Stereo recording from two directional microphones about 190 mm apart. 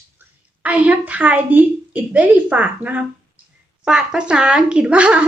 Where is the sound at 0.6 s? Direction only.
5° right (ahead or behind).